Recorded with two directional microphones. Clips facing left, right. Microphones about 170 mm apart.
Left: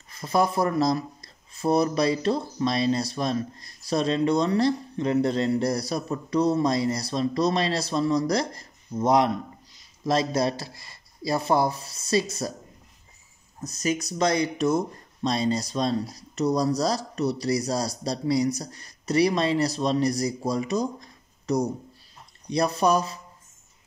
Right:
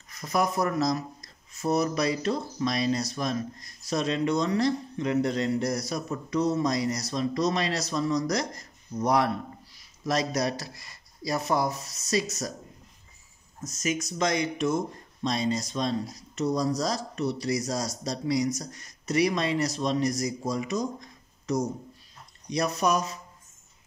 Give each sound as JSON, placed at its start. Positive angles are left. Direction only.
{"t": 0.1, "sound": "speech", "side_deg": 30}
{"t": 13.6, "sound": "speech", "side_deg": 35}